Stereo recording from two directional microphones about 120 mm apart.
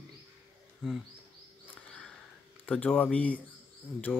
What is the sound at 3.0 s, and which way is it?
Speech, 10° left (ahead or behind).